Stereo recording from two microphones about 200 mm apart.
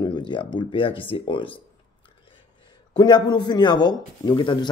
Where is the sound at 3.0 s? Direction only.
20° left (ahead or behind).